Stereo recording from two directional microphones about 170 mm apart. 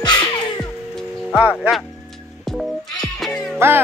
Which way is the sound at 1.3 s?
5° right (ahead or behind).